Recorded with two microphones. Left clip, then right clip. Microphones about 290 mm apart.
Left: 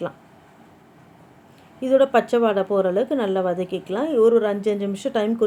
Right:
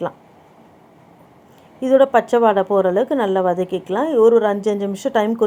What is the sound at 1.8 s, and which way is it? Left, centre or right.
Speech, centre.